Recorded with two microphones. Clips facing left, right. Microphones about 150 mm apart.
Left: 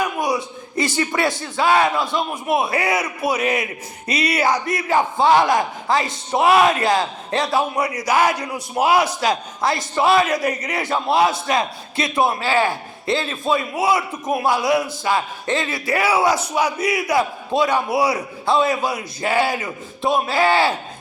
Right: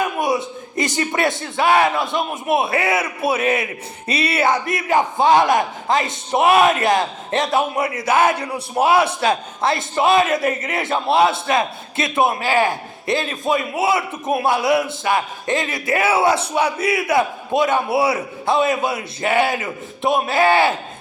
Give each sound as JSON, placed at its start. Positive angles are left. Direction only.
{"t": 0.0, "sound": "speech", "side_deg": -25}